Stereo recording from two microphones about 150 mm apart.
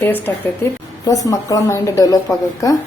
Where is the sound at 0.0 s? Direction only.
15° left (ahead or behind).